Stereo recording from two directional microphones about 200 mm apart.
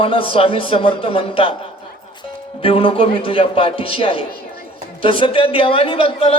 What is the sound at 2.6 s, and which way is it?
A man's voice, 25° left (ahead or behind).